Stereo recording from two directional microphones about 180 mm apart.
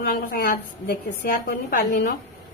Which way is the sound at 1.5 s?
50° left (ahead or behind).